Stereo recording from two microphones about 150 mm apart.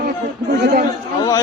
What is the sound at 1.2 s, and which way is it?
Speech, 25° left (ahead or behind).